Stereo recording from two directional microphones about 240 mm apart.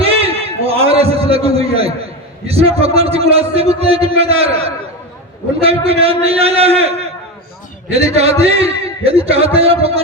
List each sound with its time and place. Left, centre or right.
0.0 s a sound: right
2.5 s a man's voice: right
7.9 s a man's voice: right